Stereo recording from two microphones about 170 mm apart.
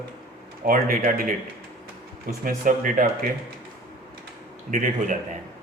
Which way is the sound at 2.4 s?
55° right (ahead or behind).